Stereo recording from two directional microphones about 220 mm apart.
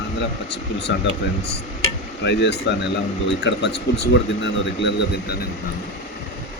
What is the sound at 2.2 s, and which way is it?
Speech, 50° left (ahead or behind).